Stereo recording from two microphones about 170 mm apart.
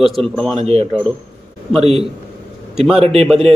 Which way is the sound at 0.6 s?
40° right (ahead or behind).